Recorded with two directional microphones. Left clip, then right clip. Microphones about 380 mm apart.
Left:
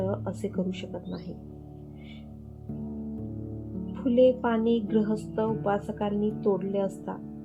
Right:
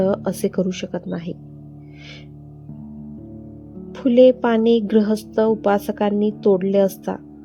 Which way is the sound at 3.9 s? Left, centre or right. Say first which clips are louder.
Right 9 dB; centre.